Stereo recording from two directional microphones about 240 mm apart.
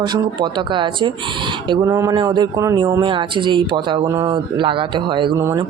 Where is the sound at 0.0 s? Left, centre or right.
Centre.